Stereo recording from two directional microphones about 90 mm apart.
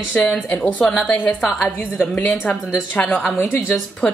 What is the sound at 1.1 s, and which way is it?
Speech, 20° left (ahead or behind).